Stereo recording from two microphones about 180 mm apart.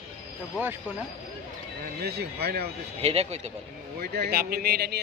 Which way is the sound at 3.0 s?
35° right (ahead or behind).